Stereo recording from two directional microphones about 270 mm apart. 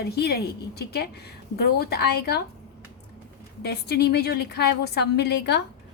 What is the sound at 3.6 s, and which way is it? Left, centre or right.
A woman's voice, left.